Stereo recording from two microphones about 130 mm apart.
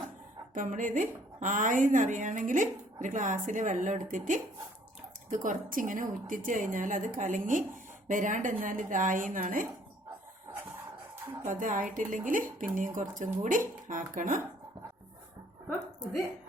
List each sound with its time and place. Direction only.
0.5 s a woman's voice: 90° right
11.4 s a woman's voice: 90° right
13.8 s a woman's voice: 80° right